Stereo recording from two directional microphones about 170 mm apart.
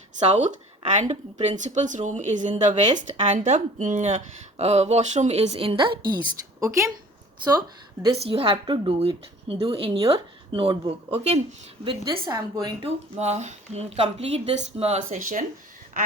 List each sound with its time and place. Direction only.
0.2 s a woman's voice: 40° right (ahead or behind)
8.0 s a woman's voice: 35° right (ahead or behind)
13.1 s a woman's voice: 40° right (ahead or behind)